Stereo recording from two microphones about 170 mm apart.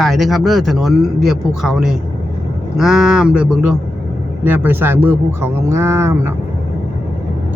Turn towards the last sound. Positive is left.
turn(degrees=-15)  # may be behind; listen again after turning